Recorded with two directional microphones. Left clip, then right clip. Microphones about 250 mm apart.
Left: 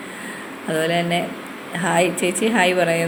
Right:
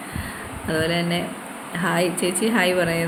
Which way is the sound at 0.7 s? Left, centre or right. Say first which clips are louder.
Left 3 dB; centre.